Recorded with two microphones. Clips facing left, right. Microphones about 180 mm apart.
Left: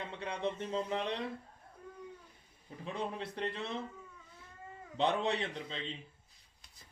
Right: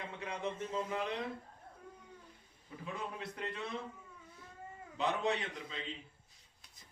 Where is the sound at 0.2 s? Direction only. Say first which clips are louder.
Left 3 dB; 30° left (ahead or behind).